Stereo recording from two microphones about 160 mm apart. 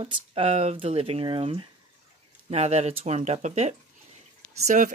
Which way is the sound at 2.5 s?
45° right (ahead or behind).